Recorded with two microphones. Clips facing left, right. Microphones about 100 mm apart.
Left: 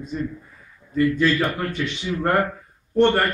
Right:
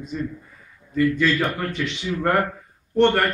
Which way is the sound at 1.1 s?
Centre (ahead or behind).